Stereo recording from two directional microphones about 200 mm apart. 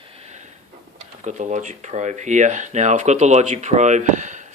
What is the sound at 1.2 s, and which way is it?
Speech, 35° right (ahead or behind).